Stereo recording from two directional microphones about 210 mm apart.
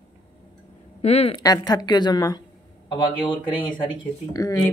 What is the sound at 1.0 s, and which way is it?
A woman's voice, 30° left (ahead or behind).